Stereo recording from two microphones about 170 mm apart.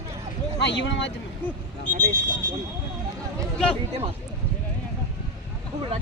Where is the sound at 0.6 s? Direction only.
90° left.